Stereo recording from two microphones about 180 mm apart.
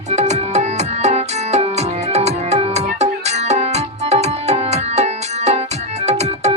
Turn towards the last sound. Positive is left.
turn(degrees=-35)  # may be behind; listen again after turning